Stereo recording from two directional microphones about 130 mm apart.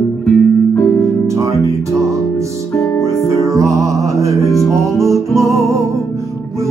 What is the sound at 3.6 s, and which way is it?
Music, 25° right (ahead or behind).